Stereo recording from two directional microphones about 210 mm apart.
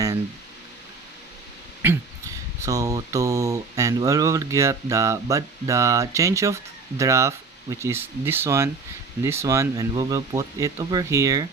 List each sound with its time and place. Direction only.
1.8 s throat clearing: 10° right (ahead or behind)
2.6 s speech: 15° right (ahead or behind)